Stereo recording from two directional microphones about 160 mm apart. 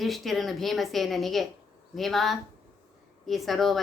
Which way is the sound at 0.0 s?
Centre (ahead or behind).